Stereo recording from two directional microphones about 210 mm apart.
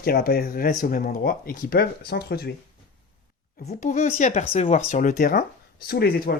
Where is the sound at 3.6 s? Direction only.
35° left (ahead or behind).